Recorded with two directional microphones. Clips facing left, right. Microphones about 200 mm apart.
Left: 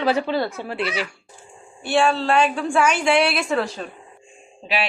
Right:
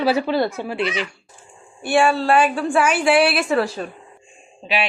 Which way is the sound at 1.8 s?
10° right (ahead or behind).